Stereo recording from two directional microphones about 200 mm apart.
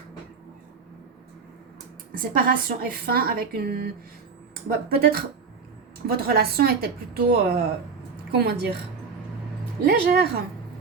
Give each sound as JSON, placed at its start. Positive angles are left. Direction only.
{"t": 2.1, "sound": "a woman's voice", "side_deg": -45}
{"t": 4.9, "sound": "a woman's voice", "side_deg": -50}
{"t": 9.8, "sound": "a woman's voice", "side_deg": -50}